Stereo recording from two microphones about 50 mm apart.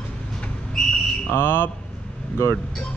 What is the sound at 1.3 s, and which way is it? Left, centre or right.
Speech, left.